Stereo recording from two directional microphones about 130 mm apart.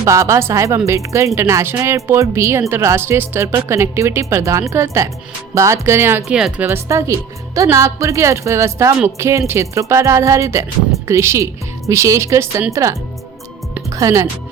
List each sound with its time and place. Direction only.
0.0 s speech: 25° right (ahead or behind)
6.2 s speech: 5° right (ahead or behind)
6.7 s speech: 20° right (ahead or behind)